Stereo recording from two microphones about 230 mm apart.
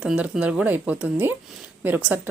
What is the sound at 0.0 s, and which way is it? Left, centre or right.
A woman's voice, centre.